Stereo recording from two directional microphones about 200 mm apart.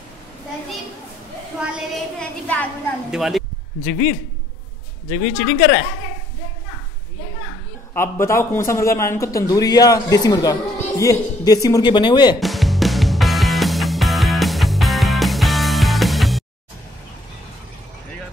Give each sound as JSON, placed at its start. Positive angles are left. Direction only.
{"t": 2.1, "sound": "a man's voice", "side_deg": 5}
{"t": 3.8, "sound": "speech", "side_deg": 45}
{"t": 7.9, "sound": "a man's voice", "side_deg": 10}
{"t": 12.4, "sound": "music", "side_deg": 0}